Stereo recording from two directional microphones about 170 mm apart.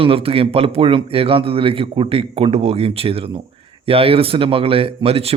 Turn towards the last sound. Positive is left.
turn(degrees=-35)  # may be behind; listen again after turning